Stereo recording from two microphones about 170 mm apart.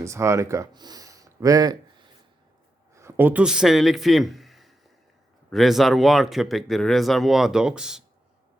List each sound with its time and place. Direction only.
0.0 s speech: 15° right (ahead or behind)
2.9 s a man's voice: 15° right (ahead or behind)